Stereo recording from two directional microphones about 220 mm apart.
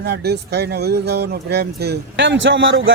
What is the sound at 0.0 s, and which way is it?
Speech, 50° right (ahead or behind).